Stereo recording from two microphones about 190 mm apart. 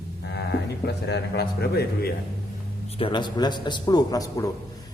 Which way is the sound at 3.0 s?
25° left (ahead or behind).